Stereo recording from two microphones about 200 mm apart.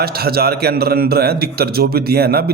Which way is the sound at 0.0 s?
50° right (ahead or behind).